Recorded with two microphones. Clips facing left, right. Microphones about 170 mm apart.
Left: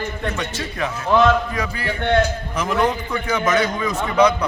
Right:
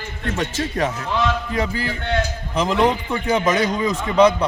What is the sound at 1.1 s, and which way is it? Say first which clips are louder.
Speech: left 9 dB; 55° left (ahead or behind).